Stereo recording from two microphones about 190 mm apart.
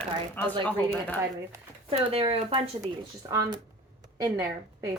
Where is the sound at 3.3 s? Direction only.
15° right (ahead or behind).